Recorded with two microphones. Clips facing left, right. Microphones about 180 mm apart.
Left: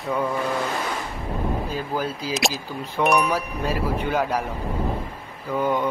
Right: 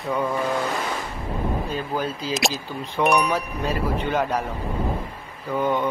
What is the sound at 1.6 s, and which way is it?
A man's voice, 10° left (ahead or behind).